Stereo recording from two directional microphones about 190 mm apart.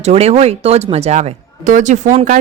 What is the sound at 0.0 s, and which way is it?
A woman's voice, 35° right (ahead or behind).